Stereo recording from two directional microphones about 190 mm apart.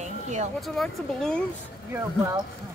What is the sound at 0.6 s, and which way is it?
Speech, centre (ahead or behind).